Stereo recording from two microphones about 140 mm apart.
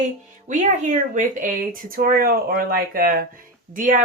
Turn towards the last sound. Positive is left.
turn(degrees=-70)  # may be behind; listen again after turning